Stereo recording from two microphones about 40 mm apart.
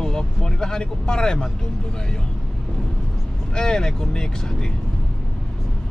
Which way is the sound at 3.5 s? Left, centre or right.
Centre.